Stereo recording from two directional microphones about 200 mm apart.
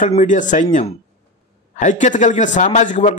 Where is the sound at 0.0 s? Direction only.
40° left (ahead or behind).